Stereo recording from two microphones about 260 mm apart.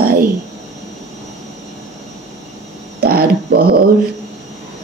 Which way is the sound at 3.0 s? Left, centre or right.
Right.